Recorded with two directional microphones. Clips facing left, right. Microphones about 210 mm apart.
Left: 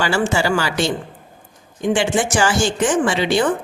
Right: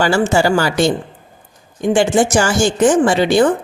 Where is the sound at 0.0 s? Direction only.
45° right (ahead or behind).